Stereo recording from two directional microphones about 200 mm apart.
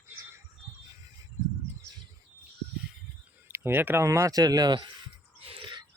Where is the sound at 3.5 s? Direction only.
10° right (ahead or behind).